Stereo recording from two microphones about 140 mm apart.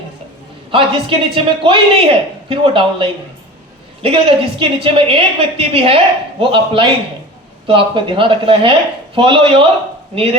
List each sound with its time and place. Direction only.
0.7 s a man's voice: 40° right (ahead or behind)